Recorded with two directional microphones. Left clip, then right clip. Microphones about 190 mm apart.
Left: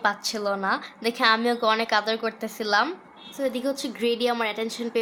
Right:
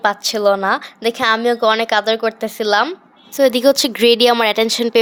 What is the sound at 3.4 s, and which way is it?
A woman's voice, 55° right (ahead or behind).